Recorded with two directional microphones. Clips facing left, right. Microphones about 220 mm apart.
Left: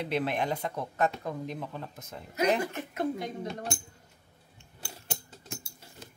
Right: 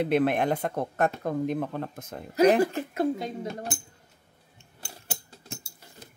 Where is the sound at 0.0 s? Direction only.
55° right (ahead or behind).